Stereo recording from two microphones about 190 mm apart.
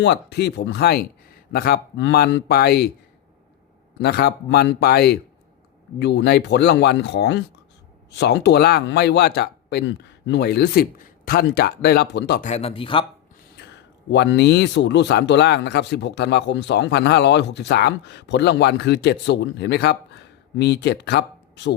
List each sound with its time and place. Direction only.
0.0 s speech: 60° left (ahead or behind)
2.0 s speech: 65° left (ahead or behind)
4.0 s speech: 55° left (ahead or behind)
12.4 s speech: 35° left (ahead or behind)
14.1 s speech: 65° left (ahead or behind)